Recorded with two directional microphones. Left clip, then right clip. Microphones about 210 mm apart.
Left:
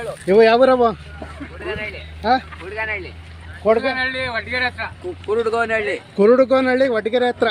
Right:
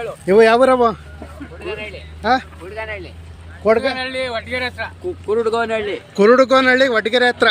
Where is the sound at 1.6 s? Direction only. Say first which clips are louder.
Left 1 dB; 50° right (ahead or behind).